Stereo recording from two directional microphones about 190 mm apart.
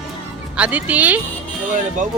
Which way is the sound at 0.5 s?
5° right (ahead or behind).